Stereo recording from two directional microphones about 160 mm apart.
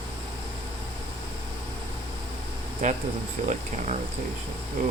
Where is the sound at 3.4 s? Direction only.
45° right (ahead or behind).